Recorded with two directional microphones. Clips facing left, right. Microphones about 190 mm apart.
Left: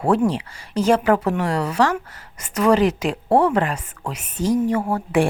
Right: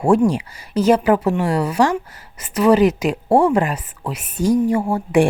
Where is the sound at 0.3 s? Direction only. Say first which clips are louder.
Right 3 dB; 10° right (ahead or behind).